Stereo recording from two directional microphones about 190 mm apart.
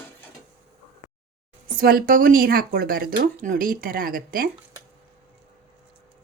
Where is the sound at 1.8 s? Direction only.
50° right (ahead or behind).